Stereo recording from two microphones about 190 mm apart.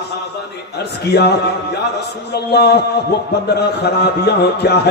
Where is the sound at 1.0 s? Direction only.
60° left (ahead or behind).